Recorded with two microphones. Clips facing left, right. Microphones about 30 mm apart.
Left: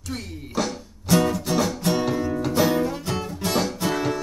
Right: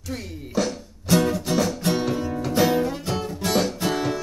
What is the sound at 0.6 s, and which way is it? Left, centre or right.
Music, centre.